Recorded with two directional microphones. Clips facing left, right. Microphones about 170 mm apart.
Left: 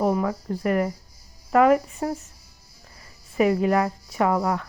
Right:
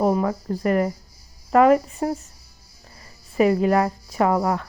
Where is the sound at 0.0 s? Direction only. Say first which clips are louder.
Right 2 dB; 35° right (ahead or behind).